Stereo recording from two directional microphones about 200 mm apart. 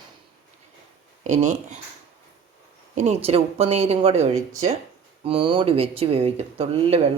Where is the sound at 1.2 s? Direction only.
35° right (ahead or behind).